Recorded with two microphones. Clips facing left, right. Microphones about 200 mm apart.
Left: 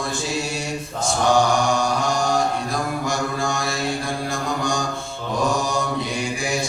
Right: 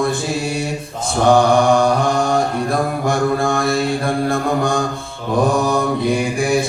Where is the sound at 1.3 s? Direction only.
55° right (ahead or behind).